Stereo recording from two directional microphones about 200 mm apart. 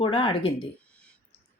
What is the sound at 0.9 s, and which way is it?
Clicking, 5° left (ahead or behind).